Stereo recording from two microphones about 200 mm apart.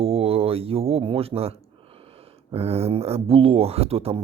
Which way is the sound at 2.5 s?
30° right (ahead or behind).